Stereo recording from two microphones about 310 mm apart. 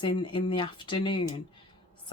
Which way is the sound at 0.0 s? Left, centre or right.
Centre.